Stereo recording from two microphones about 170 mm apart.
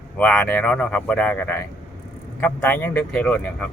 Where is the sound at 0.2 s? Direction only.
10° left (ahead or behind).